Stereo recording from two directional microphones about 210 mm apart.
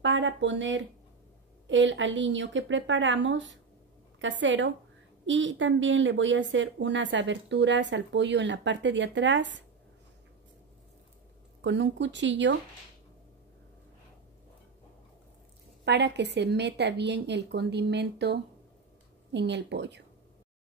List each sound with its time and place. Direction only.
0.0 s a woman's voice: 60° right (ahead or behind)
11.6 s a woman's voice: 60° right (ahead or behind)
15.8 s a woman's voice: 55° right (ahead or behind)